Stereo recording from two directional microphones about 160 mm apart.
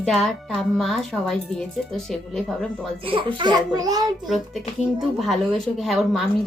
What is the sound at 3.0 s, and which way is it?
A child's voice, 30° right (ahead or behind).